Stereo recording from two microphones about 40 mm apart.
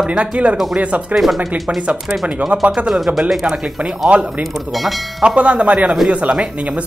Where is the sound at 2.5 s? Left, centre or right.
Right.